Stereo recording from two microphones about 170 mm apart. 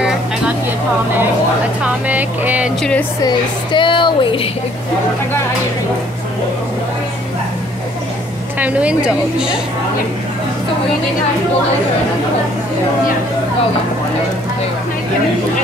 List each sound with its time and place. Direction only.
1.8 s speech: 10° right (ahead or behind)
2.8 s speech: 5° left (ahead or behind)
3.2 s a woman's voice: 25° left (ahead or behind)
8.5 s speech: 10° right (ahead or behind)